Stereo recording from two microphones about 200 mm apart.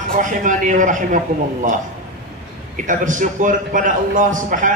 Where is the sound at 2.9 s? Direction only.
40° right (ahead or behind).